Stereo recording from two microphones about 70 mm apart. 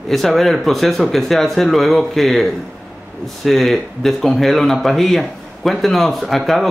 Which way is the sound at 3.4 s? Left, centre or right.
Centre.